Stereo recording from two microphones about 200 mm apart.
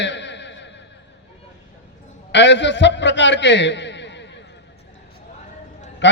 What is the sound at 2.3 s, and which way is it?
A man's voice, 60° left (ahead or behind).